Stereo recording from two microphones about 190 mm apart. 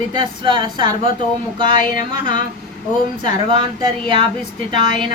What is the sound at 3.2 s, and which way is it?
Speech, 25° right (ahead or behind).